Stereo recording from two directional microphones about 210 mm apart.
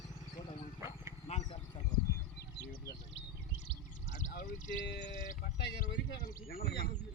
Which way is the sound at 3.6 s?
35° left (ahead or behind).